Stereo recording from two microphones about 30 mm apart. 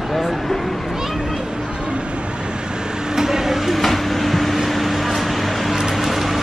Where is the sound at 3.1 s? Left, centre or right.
Centre.